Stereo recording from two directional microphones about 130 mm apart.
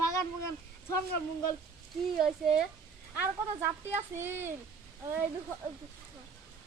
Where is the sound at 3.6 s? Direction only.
20° right (ahead or behind).